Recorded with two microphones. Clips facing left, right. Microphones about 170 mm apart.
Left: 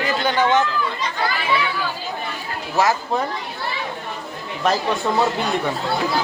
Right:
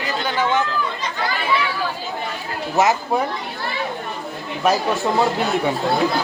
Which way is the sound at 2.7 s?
20° right (ahead or behind).